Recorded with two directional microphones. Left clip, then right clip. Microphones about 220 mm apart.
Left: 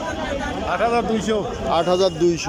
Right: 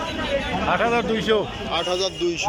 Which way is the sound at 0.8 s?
5° left (ahead or behind).